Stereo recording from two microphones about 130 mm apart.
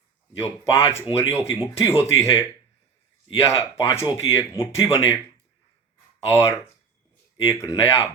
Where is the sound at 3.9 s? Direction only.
20° left (ahead or behind).